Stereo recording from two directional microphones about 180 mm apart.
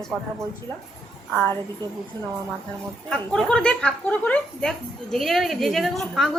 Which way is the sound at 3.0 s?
5° left (ahead or behind).